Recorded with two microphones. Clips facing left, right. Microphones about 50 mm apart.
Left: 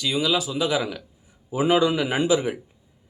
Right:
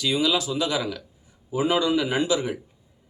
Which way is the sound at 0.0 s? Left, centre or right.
Centre.